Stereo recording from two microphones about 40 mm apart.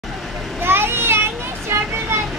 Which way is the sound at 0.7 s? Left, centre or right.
Right.